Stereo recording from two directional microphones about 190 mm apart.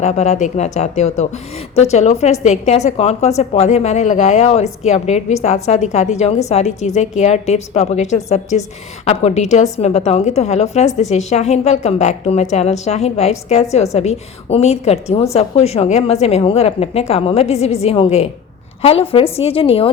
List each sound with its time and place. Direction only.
0.0 s a woman's voice: 35° left (ahead or behind)